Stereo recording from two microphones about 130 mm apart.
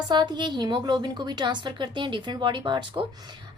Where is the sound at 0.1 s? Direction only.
35° right (ahead or behind).